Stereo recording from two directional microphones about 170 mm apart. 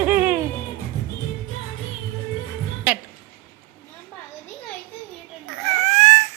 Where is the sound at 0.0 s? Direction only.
10° right (ahead or behind).